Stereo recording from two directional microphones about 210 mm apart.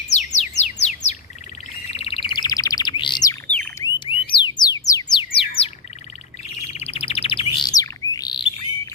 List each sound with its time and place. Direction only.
0.1 s bird: 35° left (ahead or behind)
3.4 s bird: 5° left (ahead or behind)
4.3 s music: 20° left (ahead or behind)
6.6 s bird: 30° left (ahead or behind)